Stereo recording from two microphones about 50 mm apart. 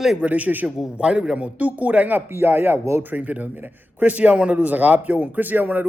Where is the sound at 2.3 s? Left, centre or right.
Right.